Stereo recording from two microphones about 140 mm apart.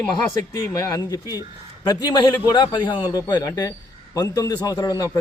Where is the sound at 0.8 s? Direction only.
25° left (ahead or behind).